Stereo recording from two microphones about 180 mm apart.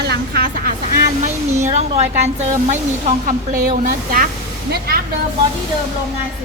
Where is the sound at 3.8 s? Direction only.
50° right (ahead or behind).